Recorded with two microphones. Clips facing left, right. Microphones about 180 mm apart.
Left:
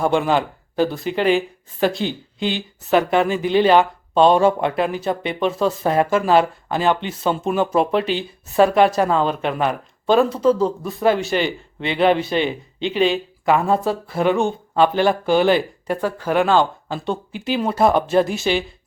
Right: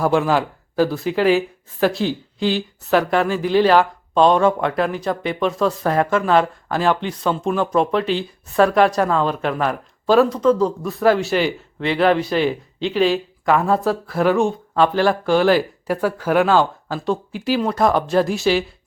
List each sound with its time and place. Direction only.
0.0 s speech: centre (ahead or behind)
4.3 s speech: 30° left (ahead or behind)
4.7 s speech: 5° left (ahead or behind)
5.8 s speech: 25° left (ahead or behind)
6.3 s speech: centre (ahead or behind)